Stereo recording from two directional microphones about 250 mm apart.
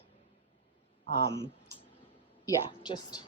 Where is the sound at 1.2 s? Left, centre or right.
Right.